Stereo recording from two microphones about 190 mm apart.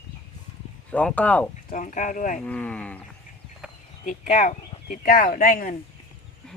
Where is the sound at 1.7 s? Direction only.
40° left (ahead or behind).